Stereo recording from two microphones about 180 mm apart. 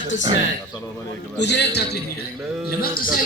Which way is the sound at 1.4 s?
70° left (ahead or behind).